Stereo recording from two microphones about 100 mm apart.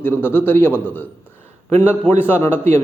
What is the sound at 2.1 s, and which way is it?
Speech, 20° left (ahead or behind).